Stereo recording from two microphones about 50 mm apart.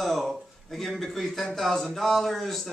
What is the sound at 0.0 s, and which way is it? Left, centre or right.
A man's voice, centre.